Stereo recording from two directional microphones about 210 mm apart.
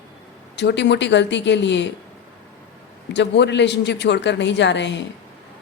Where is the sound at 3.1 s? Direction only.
55° left (ahead or behind).